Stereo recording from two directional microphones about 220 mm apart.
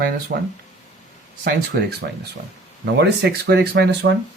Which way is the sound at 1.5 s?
45° right (ahead or behind).